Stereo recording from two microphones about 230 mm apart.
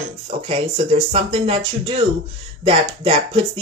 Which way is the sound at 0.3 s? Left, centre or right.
Right.